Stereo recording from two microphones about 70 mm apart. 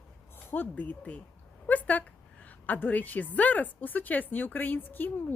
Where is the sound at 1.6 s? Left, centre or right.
Left.